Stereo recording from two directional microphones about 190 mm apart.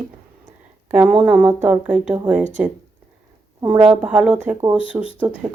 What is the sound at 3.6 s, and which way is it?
Speech, 25° right (ahead or behind).